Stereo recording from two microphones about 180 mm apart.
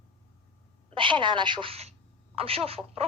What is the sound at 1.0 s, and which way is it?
A woman's voice, 25° right (ahead or behind).